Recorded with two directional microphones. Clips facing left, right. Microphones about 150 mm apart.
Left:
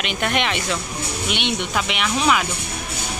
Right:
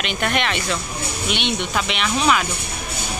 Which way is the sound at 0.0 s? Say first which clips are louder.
Even; 15° left (ahead or behind).